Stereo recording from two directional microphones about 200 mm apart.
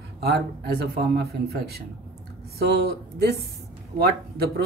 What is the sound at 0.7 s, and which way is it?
Speech, 55° right (ahead or behind).